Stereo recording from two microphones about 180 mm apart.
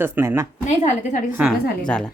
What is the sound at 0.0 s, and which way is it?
Speech, 15° right (ahead or behind).